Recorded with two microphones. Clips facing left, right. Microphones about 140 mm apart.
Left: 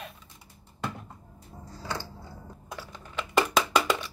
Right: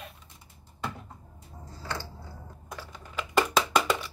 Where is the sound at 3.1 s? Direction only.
Centre (ahead or behind).